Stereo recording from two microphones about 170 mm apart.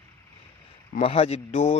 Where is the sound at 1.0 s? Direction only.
35° left (ahead or behind).